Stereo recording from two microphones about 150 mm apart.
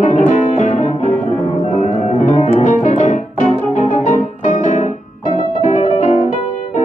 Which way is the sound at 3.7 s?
55° left (ahead or behind).